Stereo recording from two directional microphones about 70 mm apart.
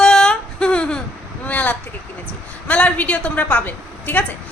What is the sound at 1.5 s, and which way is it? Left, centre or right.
A man's voice, left.